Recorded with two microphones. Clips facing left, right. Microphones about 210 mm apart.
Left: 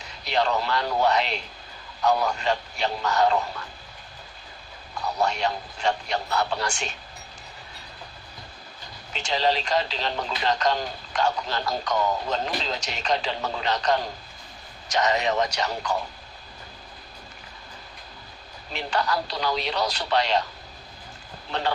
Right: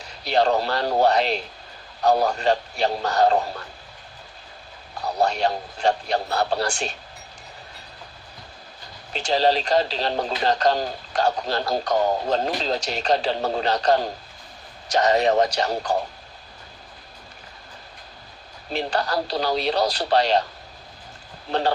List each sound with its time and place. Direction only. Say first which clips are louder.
0.3 s speech: right 4 dB; 35° right (ahead or behind)
5.0 s speech: right 3 dB; 35° right (ahead or behind)
9.1 s speech: right 4 dB; 35° right (ahead or behind)
18.7 s speech: right 2 dB; 35° right (ahead or behind)